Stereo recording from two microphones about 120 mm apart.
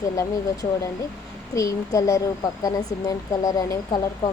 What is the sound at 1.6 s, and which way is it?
Speech, 25° left (ahead or behind).